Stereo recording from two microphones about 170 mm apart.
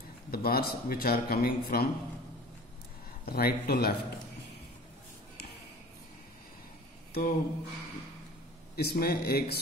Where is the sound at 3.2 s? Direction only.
65° left (ahead or behind).